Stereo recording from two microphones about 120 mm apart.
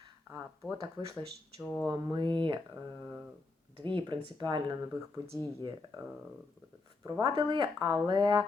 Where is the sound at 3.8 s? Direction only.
45° right (ahead or behind).